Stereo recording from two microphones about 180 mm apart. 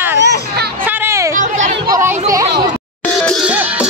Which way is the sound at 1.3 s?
45° right (ahead or behind).